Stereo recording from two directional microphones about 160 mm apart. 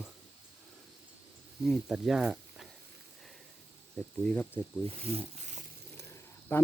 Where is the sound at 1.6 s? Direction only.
Centre (ahead or behind).